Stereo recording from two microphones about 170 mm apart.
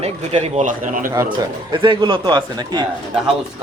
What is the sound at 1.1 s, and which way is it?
A man's voice, 25° right (ahead or behind).